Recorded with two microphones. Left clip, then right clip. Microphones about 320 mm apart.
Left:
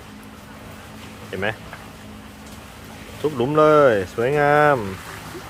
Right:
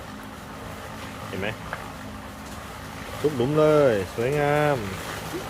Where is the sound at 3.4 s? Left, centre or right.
Centre.